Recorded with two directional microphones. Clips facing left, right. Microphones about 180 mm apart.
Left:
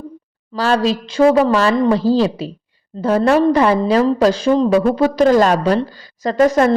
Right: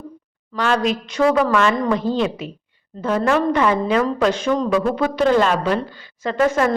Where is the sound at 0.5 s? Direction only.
35° left (ahead or behind).